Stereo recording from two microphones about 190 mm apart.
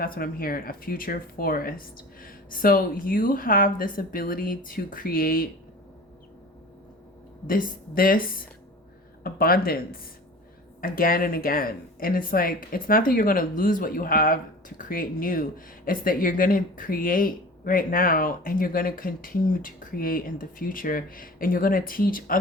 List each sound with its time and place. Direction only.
0.0 s speech: 50° left (ahead or behind)
7.4 s speech: 45° left (ahead or behind)